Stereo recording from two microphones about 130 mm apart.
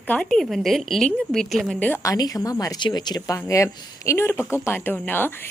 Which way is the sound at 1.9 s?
25° left (ahead or behind).